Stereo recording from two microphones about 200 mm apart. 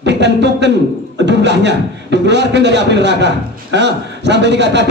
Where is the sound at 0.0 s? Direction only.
60° right (ahead or behind).